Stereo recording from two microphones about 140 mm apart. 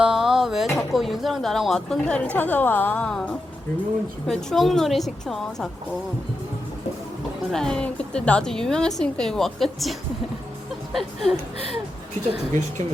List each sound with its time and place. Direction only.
0.0 s a sound: 5° right (ahead or behind)
0.9 s a woman's voice: centre (ahead or behind)
7.5 s a woman's voice: 5° left (ahead or behind)
12.3 s speech: 55° right (ahead or behind)